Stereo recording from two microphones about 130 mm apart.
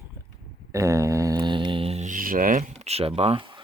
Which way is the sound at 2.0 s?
90° right.